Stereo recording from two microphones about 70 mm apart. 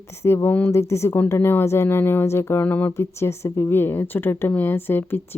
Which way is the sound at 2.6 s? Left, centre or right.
Left.